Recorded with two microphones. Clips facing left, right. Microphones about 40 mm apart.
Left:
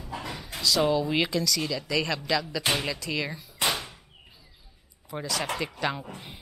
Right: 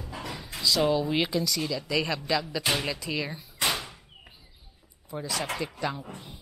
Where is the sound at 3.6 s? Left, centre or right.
Centre.